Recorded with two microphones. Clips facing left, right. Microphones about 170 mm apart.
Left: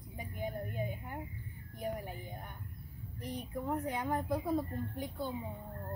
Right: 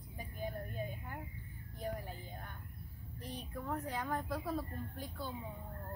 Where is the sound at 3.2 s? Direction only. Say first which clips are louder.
Left 5 dB; 20° left (ahead or behind).